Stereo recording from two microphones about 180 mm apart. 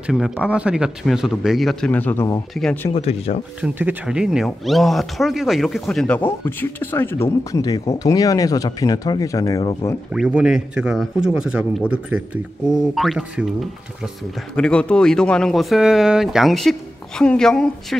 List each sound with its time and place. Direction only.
0.0 s speech: 5° right (ahead or behind)
2.9 s speech: 35° left (ahead or behind)
3.6 s speech: 5° right (ahead or behind); by 9.8 s 25° left (ahead or behind)
10.1 s speech: 5° right (ahead or behind)
12.9 s speech: centre (ahead or behind)
14.5 s speech: 5° left (ahead or behind)